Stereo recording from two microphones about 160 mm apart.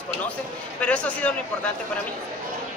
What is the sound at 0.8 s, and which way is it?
Speech, 5° left (ahead or behind).